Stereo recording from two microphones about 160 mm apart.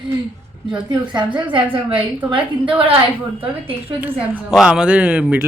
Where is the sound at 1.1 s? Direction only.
25° right (ahead or behind).